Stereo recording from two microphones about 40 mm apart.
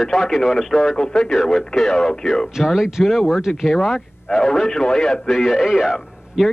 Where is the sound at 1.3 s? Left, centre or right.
Centre.